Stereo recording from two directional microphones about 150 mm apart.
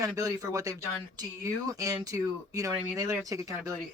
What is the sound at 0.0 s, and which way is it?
Speech, 25° right (ahead or behind).